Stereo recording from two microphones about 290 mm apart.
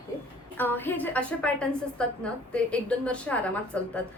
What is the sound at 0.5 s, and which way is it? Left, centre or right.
A woman's voice, centre.